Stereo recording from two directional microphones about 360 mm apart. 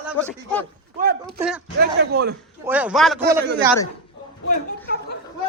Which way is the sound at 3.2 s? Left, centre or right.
Right.